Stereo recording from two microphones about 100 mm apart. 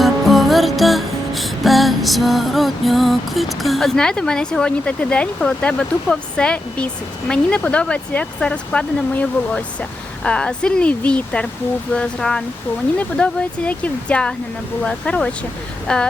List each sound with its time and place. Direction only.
0.0 s music: centre (ahead or behind)
10.2 s speech: 10° left (ahead or behind)